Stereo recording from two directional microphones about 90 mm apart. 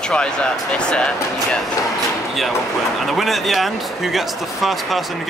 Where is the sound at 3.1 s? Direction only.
Centre (ahead or behind).